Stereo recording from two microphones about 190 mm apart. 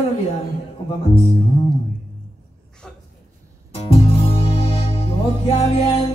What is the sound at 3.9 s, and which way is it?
Music, 30° left (ahead or behind).